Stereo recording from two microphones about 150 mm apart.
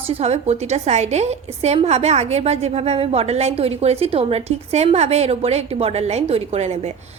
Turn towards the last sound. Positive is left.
turn(degrees=-45)  # may be behind; listen again after turning